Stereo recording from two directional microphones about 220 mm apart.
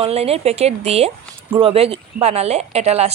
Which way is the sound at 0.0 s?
25° right (ahead or behind).